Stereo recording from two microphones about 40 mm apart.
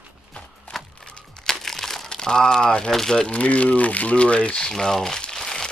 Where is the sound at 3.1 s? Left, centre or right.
Left.